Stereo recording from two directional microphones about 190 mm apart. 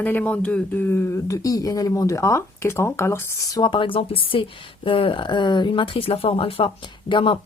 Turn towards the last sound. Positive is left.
turn(degrees=25)  # may be behind; listen again after turning